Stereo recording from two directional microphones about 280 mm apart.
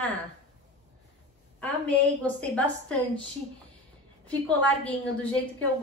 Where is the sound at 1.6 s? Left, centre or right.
Centre.